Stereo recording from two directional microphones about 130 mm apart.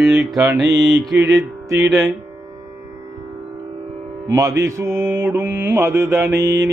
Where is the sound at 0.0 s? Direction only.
5° right (ahead or behind).